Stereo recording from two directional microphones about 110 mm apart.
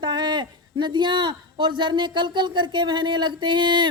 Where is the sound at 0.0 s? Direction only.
45° right (ahead or behind).